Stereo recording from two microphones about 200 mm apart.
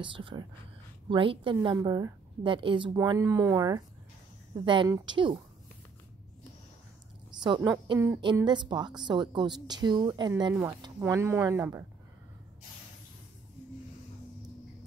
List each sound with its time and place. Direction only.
0.0 s a woman's voice: 25° right (ahead or behind)
7.4 s a woman's voice: 20° right (ahead or behind)